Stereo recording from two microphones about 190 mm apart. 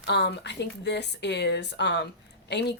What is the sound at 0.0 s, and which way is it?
Speech, 60° left (ahead or behind).